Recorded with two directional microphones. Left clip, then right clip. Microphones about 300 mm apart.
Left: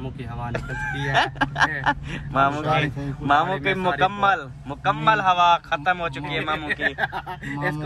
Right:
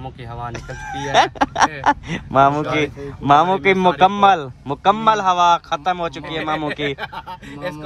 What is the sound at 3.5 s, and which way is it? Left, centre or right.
Speech, right.